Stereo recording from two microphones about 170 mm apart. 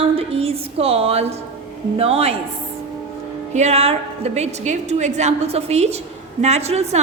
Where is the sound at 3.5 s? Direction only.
40° right (ahead or behind).